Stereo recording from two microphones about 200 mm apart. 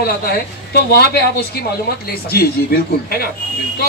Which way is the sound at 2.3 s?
50° left (ahead or behind).